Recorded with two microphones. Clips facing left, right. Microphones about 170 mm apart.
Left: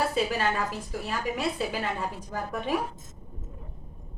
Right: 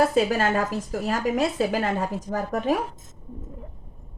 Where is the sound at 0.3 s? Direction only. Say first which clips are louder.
Right 5 dB; 45° right (ahead or behind).